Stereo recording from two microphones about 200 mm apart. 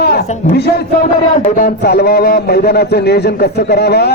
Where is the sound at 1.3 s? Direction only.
40° left (ahead or behind).